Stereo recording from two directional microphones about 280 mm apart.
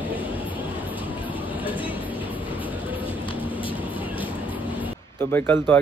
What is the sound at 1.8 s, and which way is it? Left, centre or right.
Train, centre.